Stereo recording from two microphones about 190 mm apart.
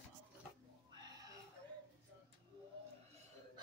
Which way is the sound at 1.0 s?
20° right (ahead or behind).